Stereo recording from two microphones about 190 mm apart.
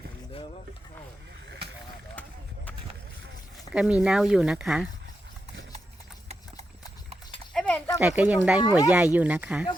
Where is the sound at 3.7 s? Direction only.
5° right (ahead or behind).